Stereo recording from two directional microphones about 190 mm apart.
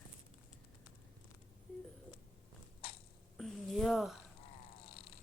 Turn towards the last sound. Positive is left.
turn(degrees=0)  # may be behind; listen again after turning